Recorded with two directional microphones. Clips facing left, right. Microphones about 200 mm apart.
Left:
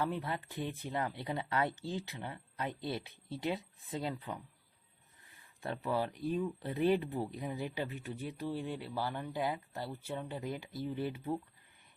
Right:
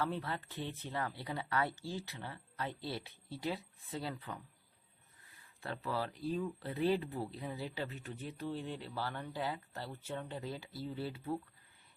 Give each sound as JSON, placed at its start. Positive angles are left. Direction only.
{"t": 0.0, "sound": "speech", "side_deg": 15}
{"t": 5.6, "sound": "speech", "side_deg": 20}